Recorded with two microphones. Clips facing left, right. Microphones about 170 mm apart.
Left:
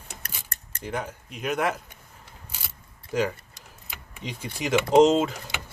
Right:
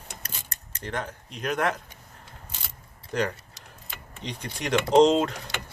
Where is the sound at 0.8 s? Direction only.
5° left (ahead or behind).